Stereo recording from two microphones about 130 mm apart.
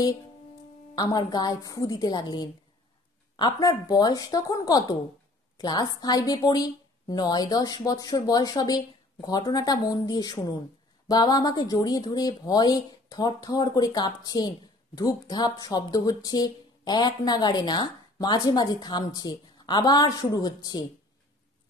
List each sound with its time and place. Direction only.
0.9 s speech: 30° left (ahead or behind)